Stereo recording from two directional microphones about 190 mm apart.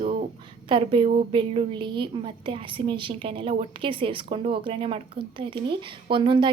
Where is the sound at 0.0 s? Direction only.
30° right (ahead or behind).